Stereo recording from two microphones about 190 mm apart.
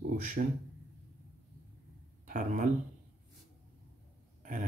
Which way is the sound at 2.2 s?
45° right (ahead or behind).